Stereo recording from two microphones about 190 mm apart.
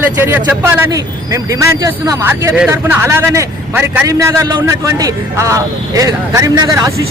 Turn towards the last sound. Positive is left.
turn(degrees=-15)  # may be behind; listen again after turning